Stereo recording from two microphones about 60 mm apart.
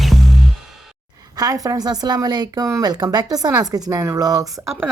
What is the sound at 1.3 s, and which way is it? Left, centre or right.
A woman's voice, right.